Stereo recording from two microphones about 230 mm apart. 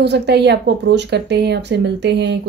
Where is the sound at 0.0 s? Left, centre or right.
Right.